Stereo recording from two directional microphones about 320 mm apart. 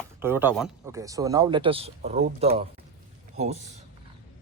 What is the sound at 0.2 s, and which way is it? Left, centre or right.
A man's voice, centre.